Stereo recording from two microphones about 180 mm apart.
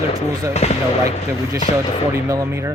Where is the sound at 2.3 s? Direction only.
15° right (ahead or behind).